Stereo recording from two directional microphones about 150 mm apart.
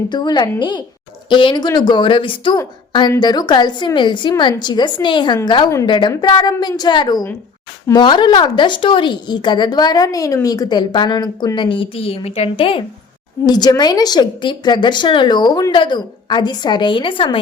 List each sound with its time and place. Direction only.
0.1 s a woman's voice: 30° left (ahead or behind)
13.4 s a woman's voice: 25° left (ahead or behind)